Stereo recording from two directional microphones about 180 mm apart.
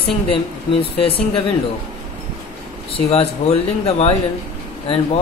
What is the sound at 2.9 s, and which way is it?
Speech, 35° left (ahead or behind).